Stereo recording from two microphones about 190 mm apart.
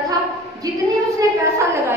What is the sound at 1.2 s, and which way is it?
Speech, 15° right (ahead or behind).